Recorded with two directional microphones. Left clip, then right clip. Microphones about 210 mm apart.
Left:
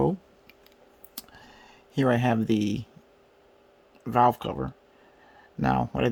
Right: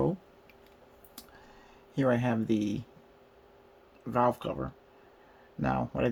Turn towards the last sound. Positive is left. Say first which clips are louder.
# left 5 dB
turn(degrees=55)  # may be behind; listen again after turning